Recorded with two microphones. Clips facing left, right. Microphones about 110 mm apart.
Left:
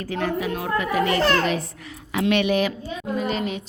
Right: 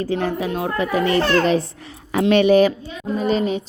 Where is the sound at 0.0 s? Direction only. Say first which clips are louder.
Right 3 dB; 30° right (ahead or behind).